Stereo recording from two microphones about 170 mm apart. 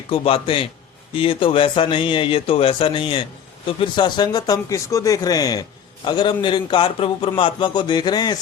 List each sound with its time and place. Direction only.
0.1 s a man's voice: 35° left (ahead or behind)